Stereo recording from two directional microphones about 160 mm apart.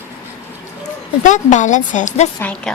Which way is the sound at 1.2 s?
50° left (ahead or behind).